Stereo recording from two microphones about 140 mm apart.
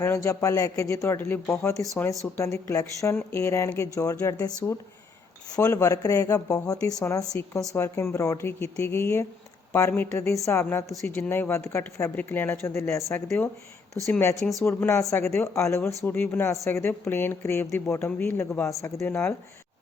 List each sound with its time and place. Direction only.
0.0 s speech: 20° left (ahead or behind)